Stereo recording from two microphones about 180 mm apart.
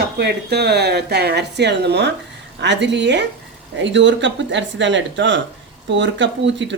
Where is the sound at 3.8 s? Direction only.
90° right.